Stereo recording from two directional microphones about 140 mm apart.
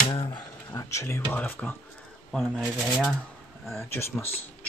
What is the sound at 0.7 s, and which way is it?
Speech, 20° left (ahead or behind).